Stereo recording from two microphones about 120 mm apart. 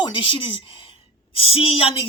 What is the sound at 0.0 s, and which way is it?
A woman's voice, 45° left (ahead or behind).